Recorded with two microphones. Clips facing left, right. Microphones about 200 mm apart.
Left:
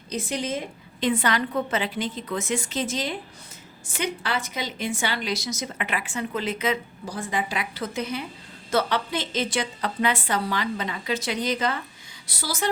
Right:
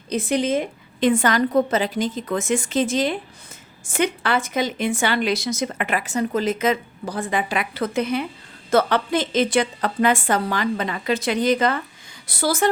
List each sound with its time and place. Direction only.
0.1 s a woman's voice: 60° right (ahead or behind)